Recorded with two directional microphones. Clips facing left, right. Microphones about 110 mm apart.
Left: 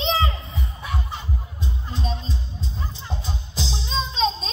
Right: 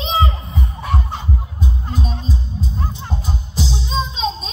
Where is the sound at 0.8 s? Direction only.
50° right (ahead or behind).